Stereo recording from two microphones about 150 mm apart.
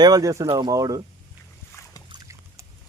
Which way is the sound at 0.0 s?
25° right (ahead or behind).